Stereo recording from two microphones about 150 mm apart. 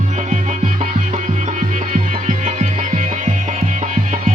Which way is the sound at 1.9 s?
55° right (ahead or behind).